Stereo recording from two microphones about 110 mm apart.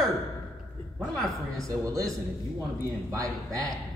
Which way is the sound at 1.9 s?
35° right (ahead or behind).